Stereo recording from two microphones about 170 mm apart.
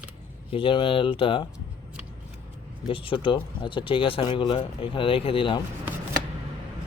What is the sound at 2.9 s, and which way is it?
Speech, 30° left (ahead or behind).